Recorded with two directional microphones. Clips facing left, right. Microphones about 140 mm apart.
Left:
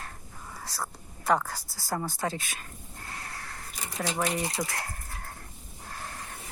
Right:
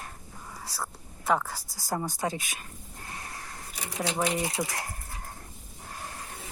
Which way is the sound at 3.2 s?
20° right (ahead or behind).